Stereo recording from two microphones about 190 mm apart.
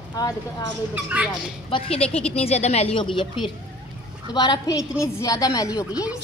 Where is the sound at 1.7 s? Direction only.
30° left (ahead or behind).